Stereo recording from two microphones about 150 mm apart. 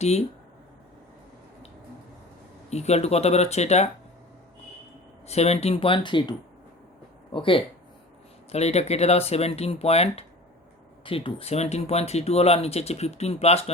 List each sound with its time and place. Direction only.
2.6 s speech: 45° left (ahead or behind)
5.3 s speech: 45° left (ahead or behind)
7.3 s speech: 35° left (ahead or behind)
8.5 s speech: 45° left (ahead or behind)